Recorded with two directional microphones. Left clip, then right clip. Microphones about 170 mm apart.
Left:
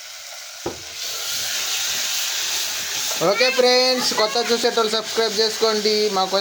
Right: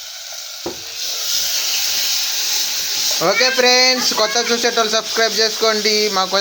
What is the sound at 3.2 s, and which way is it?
Speech, centre (ahead or behind).